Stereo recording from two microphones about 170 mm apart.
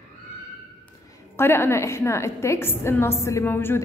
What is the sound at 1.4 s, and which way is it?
A woman's voice, 15° left (ahead or behind).